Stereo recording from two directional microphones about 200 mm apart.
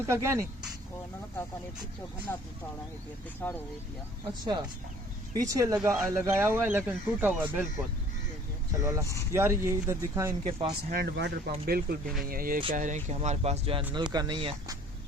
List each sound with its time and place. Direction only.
0.0 s speech: 15° right (ahead or behind)
2.3 s speech: 10° left (ahead or behind)
5.3 s speech: 15° right (ahead or behind)
8.7 s speech: 15° right (ahead or behind)
10.4 s speech: 25° right (ahead or behind)
10.9 s speech: 55° right (ahead or behind); by 14.8 s 25° right (ahead or behind)